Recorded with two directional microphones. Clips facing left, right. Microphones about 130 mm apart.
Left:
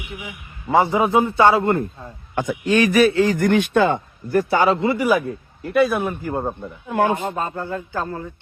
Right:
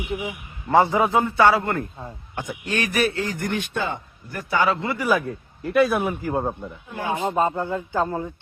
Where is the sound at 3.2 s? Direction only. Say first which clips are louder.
Left 10 dB; 90° left; by 4.0 s 70° left (ahead or behind).